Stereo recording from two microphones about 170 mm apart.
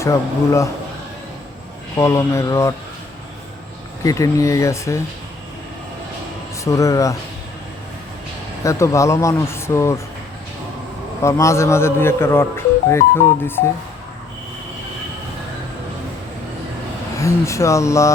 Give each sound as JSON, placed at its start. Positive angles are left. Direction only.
{"t": 0.0, "sound": "speech", "side_deg": 15}
{"t": 2.0, "sound": "speech", "side_deg": 15}
{"t": 4.0, "sound": "speech", "side_deg": 20}
{"t": 6.7, "sound": "speech", "side_deg": 20}
{"t": 8.6, "sound": "speech", "side_deg": 15}
{"t": 11.2, "sound": "speech", "side_deg": 15}
{"t": 17.2, "sound": "speech", "side_deg": 15}